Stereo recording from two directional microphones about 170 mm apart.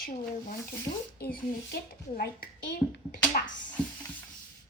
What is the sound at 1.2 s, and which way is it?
A child's voice, 65° left (ahead or behind).